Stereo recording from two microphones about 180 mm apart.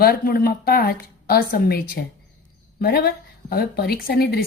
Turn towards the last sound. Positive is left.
turn(degrees=60)  # may be behind; listen again after turning